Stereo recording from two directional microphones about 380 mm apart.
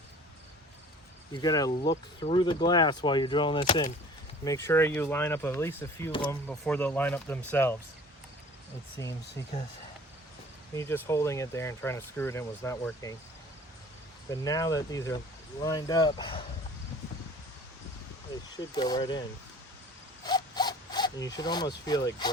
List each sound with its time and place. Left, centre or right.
1.3 s speech: centre
9.3 s speech: centre
10.8 s speech: centre
14.3 s speech: centre
18.5 s speech: centre
20.2 s a sound: centre